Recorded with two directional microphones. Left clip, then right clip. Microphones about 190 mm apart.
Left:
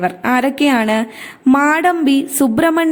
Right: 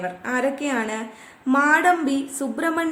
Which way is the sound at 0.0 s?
50° left (ahead or behind).